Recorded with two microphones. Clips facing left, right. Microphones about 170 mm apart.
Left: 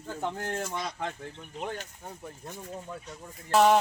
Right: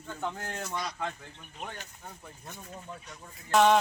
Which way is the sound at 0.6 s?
25° left (ahead or behind).